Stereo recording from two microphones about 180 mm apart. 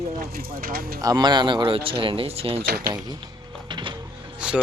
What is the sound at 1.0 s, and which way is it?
Speech, 20° right (ahead or behind).